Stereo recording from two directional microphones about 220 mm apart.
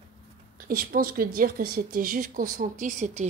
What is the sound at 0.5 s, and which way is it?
Speech, 40° right (ahead or behind).